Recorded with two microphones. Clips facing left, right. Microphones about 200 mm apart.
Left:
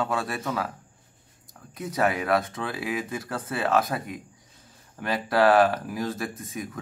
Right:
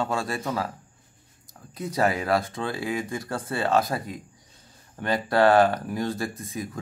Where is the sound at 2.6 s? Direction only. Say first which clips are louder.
Right 1 dB; 25° right (ahead or behind).